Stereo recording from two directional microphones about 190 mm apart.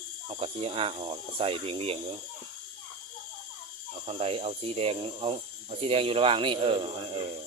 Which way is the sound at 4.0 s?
35° right (ahead or behind).